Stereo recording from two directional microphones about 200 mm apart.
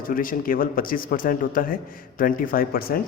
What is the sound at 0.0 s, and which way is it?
A man's voice, 45° left (ahead or behind).